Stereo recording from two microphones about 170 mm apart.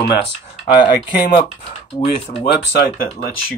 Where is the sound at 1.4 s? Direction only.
25° left (ahead or behind).